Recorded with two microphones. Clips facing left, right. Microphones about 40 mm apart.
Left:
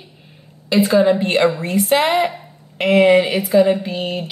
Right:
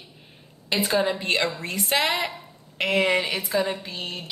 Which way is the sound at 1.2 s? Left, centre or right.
Left.